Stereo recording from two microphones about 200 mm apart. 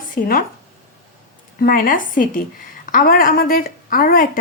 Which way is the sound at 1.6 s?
45° left (ahead or behind).